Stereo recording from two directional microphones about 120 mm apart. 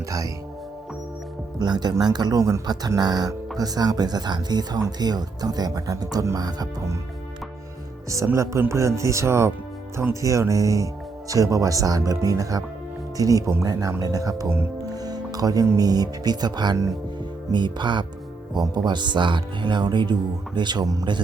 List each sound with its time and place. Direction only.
1.5 s speech: 35° right (ahead or behind)
8.1 s speech: 25° right (ahead or behind)